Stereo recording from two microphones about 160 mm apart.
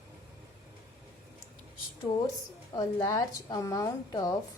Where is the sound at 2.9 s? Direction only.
25° left (ahead or behind).